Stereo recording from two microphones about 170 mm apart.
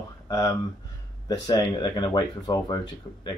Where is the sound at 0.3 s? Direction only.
20° left (ahead or behind).